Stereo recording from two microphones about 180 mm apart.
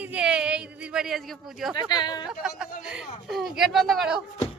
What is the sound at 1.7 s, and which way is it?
Speech, 25° left (ahead or behind).